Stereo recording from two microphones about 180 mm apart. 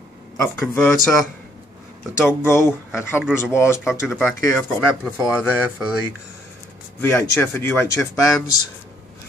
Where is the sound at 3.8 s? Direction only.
Centre (ahead or behind).